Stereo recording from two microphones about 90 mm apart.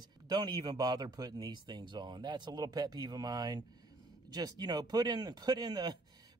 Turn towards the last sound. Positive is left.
turn(degrees=-50)  # may be behind; listen again after turning